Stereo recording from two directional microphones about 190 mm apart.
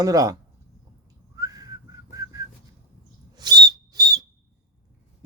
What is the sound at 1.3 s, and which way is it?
Whistling, 20° right (ahead or behind).